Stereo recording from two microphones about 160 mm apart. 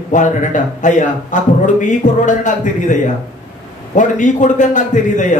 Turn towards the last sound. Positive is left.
turn(degrees=50)  # may be behind; listen again after turning